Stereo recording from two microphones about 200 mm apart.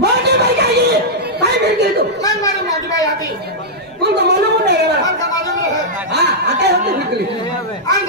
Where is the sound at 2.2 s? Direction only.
15° left (ahead or behind).